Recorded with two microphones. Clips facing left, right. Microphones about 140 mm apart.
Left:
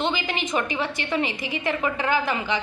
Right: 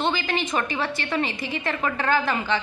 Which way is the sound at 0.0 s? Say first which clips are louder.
Right 1 dB; 15° left (ahead or behind).